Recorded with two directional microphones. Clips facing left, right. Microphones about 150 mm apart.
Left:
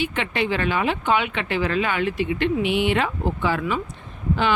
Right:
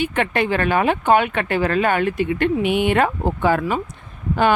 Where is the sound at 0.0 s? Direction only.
50° right (ahead or behind).